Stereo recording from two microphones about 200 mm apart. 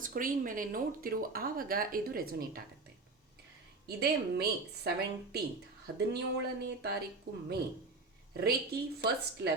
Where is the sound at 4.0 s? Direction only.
50° right (ahead or behind).